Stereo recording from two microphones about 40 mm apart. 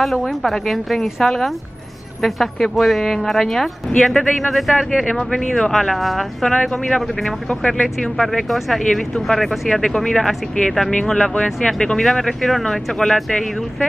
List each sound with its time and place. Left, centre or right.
0.2 s a woman's voice: centre
5.0 s speech: centre
6.5 s speech: centre
7.4 s speech: left
7.8 s speech: centre
12.0 s speech: centre